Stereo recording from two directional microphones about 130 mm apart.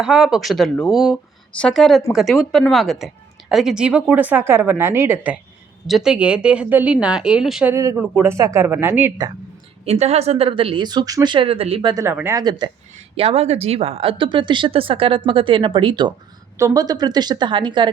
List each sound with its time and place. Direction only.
0.0 s a woman's voice: 5° right (ahead or behind)
7.7 s speech: 20° right (ahead or behind)
9.8 s speech: 55° right (ahead or behind)
12.1 s speech: 20° right (ahead or behind)
12.4 s a woman's voice: 35° right (ahead or behind)
12.9 s a woman's voice: 55° right (ahead or behind); by 16.1 s 40° right (ahead or behind)
16.6 s a woman's voice: 25° right (ahead or behind)